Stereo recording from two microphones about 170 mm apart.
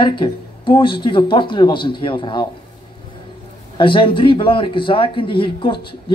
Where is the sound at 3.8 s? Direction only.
30° left (ahead or behind).